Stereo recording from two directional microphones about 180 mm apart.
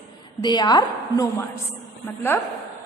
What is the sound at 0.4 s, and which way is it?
A woman's voice, 25° left (ahead or behind).